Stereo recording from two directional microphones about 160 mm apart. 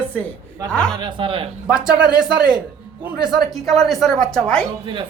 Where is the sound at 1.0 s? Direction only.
30° right (ahead or behind).